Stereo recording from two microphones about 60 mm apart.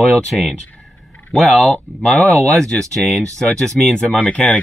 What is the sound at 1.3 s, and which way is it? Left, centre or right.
Speech, centre.